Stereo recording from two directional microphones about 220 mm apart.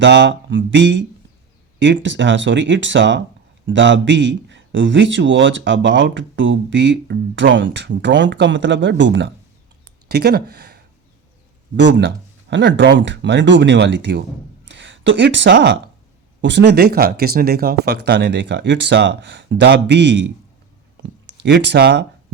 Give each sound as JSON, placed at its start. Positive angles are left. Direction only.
{"t": 0.0, "sound": "a man's voice", "side_deg": -55}
{"t": 11.8, "sound": "speech", "side_deg": -50}